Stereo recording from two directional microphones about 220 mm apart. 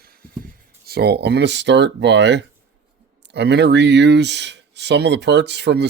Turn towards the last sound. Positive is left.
turn(degrees=-50)  # may be behind; listen again after turning